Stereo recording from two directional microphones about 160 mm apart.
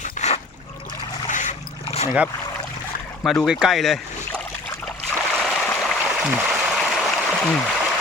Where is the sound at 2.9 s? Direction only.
70° left (ahead or behind).